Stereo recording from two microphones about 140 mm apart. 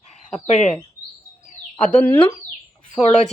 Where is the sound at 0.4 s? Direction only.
55° left (ahead or behind).